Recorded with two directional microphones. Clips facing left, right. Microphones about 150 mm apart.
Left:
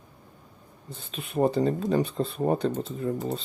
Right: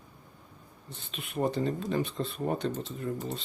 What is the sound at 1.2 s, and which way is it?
Speech, 35° left (ahead or behind).